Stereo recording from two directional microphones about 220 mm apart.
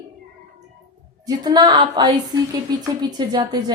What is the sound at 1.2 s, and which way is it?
A woman's voice, 15° right (ahead or behind).